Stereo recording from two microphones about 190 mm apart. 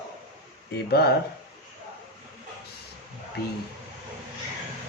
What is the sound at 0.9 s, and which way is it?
Speech, 60° left (ahead or behind).